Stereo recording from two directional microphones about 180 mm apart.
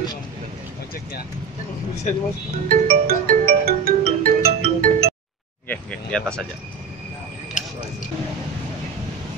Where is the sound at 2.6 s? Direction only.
55° right (ahead or behind).